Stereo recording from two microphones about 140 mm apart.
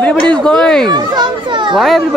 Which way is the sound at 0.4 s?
5° left (ahead or behind).